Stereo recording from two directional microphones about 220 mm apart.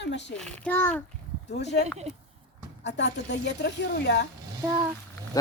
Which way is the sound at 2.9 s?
50° left (ahead or behind).